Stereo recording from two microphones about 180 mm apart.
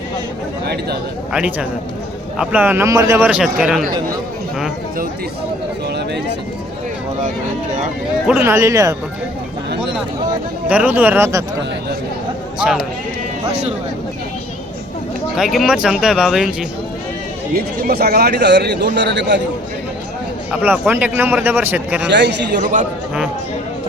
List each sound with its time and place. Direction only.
1.3 s speech: 5° right (ahead or behind)
8.3 s speech: 15° right (ahead or behind)
10.7 s speech: 10° right (ahead or behind)
12.5 s speech: 5° right (ahead or behind)
13.5 s speech: 40° right (ahead or behind)
15.4 s speech: centre (ahead or behind)
17.5 s a man's voice: 55° right (ahead or behind)
20.5 s speech: 10° right (ahead or behind)
22.1 s a man's voice: 75° right (ahead or behind)
22.6 s a man's voice: 45° right (ahead or behind)